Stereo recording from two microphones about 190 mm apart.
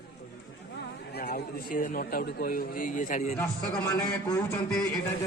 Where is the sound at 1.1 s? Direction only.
45° left (ahead or behind).